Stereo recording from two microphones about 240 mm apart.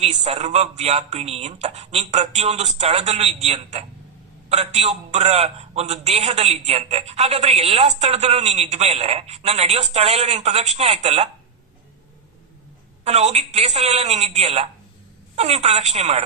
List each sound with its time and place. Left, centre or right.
0.0 s a man's voice: right
13.1 s a man's voice: right